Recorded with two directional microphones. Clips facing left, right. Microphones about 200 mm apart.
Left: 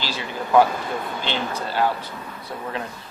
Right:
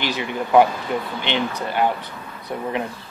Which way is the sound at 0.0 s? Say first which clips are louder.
Right 4 dB; 20° right (ahead or behind).